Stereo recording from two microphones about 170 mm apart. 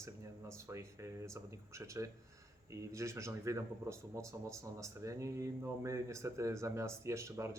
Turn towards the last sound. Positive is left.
turn(degrees=-15)  # may be behind; listen again after turning